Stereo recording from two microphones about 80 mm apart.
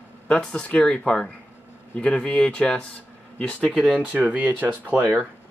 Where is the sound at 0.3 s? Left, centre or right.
Centre.